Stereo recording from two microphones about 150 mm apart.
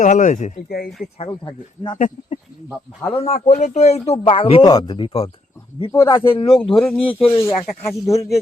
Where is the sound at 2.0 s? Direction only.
55° left (ahead or behind).